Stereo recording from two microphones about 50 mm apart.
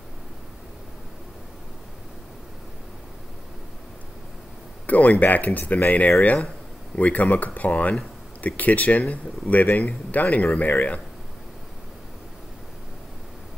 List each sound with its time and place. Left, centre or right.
4.8 s speech: left